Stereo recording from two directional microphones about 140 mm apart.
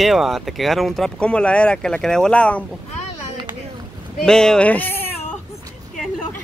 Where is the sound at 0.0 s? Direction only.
Centre (ahead or behind).